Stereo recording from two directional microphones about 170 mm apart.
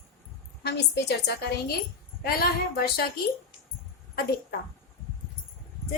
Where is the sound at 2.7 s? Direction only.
65° left (ahead or behind).